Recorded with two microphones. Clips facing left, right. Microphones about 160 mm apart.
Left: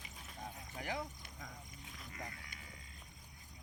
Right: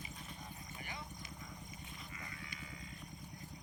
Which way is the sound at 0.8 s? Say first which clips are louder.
Left 9 dB; 90° left.